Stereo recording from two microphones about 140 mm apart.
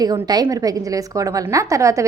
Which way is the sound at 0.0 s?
30° right (ahead or behind).